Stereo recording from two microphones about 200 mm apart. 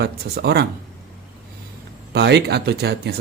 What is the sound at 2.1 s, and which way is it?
A man's voice, 55° right (ahead or behind).